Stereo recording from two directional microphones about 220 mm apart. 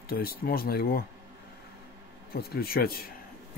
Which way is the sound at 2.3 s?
45° left (ahead or behind).